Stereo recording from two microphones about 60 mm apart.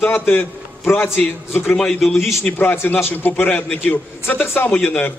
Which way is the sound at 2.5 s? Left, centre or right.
Left.